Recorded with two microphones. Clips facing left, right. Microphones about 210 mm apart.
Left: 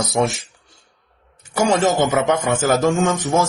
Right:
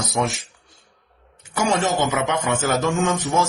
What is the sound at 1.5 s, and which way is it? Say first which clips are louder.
A man's voice: left 4 dB; 35° left (ahead or behind).